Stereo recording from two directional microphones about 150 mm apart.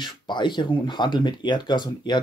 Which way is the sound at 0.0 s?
30° left (ahead or behind).